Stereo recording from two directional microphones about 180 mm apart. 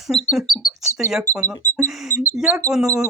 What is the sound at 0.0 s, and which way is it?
Speech, centre (ahead or behind).